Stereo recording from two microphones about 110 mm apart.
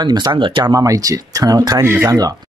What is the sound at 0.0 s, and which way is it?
Speech, 40° right (ahead or behind).